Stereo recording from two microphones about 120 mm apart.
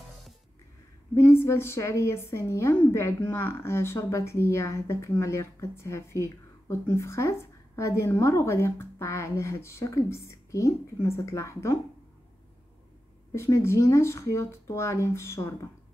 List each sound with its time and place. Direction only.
1.1 s a woman's voice: 20° left (ahead or behind)
13.3 s a woman's voice: 20° left (ahead or behind)